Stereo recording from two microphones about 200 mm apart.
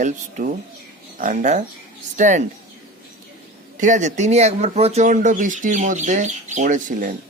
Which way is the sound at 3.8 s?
35° right (ahead or behind).